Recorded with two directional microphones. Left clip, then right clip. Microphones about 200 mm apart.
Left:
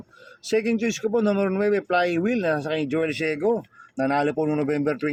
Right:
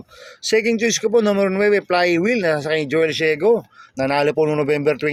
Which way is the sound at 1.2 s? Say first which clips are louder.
Right 5 dB; 40° right (ahead or behind).